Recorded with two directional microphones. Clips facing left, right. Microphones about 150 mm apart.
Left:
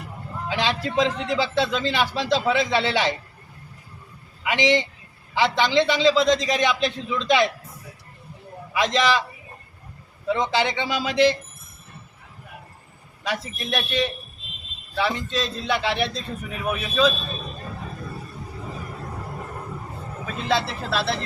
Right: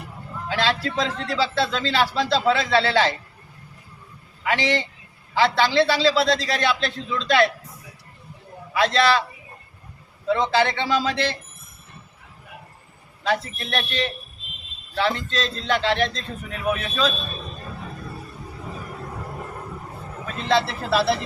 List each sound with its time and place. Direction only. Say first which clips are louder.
0.4 s a man's voice: right 1 dB; 15° left (ahead or behind)
4.4 s a man's voice: left 2 dB; 15° left (ahead or behind)
8.7 s a man's voice: right 2 dB; 15° left (ahead or behind)
10.2 s a man's voice: right 2 dB; 15° left (ahead or behind)
13.2 s a man's voice: right 4 dB; 15° left (ahead or behind)
20.2 s speech: right 2 dB; centre (ahead or behind)